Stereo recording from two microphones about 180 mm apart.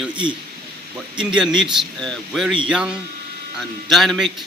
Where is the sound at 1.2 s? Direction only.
5° right (ahead or behind).